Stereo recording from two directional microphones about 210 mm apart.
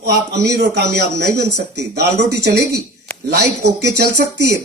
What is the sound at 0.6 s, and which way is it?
Speech, 55° right (ahead or behind).